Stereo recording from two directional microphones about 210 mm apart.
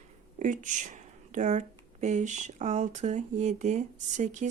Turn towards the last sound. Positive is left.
turn(degrees=-35)  # may be behind; listen again after turning